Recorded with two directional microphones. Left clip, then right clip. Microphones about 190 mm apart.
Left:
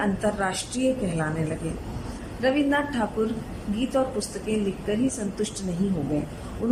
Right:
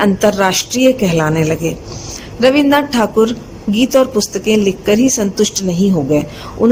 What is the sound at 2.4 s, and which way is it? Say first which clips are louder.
A woman's voice: right 13 dB; 55° right (ahead or behind).